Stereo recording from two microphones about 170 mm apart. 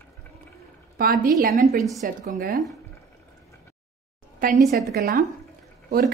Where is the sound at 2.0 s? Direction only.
55° right (ahead or behind).